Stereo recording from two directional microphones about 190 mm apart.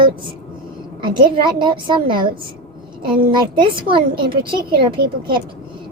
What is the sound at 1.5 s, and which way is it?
A woman's voice, 25° right (ahead or behind).